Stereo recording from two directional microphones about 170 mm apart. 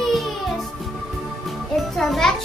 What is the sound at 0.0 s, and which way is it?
Music, centre (ahead or behind).